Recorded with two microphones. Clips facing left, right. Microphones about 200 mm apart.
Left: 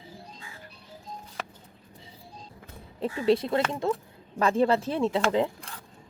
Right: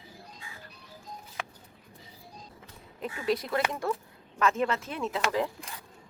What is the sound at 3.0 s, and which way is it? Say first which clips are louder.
Speech: left 6 dB; 30° left (ahead or behind).